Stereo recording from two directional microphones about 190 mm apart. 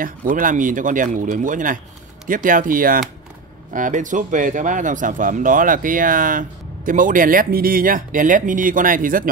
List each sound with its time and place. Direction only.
0.0 s speech: 45° right (ahead or behind)